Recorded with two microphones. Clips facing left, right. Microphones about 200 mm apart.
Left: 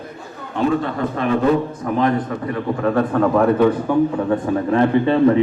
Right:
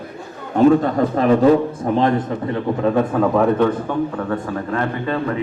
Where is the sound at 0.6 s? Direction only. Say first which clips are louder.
Right 6 dB; 40° right (ahead or behind).